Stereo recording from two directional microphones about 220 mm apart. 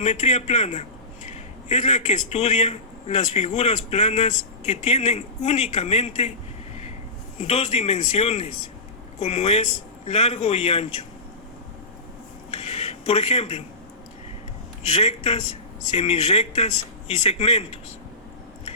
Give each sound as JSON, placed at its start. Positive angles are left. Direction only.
{"t": 0.0, "sound": "a man's voice", "side_deg": 30}
{"t": 7.3, "sound": "a man's voice", "side_deg": 30}
{"t": 12.5, "sound": "a sound", "side_deg": 30}
{"t": 14.8, "sound": "a man's voice", "side_deg": 30}